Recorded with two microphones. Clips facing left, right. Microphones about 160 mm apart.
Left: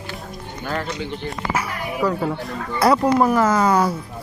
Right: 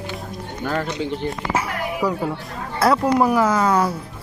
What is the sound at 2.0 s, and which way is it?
Speech, 5° right (ahead or behind).